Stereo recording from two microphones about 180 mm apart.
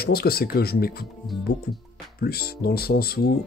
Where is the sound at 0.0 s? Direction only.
60° left (ahead or behind).